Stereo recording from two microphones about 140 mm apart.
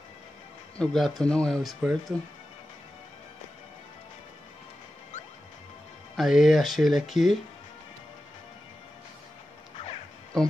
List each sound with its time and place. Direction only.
0.7 s speech: centre (ahead or behind)
6.1 s speech: centre (ahead or behind)